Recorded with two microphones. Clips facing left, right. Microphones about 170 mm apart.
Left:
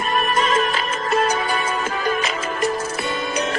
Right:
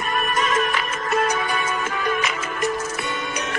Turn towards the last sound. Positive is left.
turn(degrees=30)  # may be behind; listen again after turning